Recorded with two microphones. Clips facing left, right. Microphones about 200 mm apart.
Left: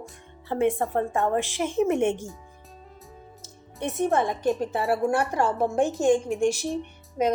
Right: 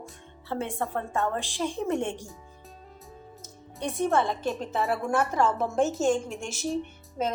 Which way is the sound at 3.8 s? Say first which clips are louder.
Left 2 dB; 20° left (ahead or behind).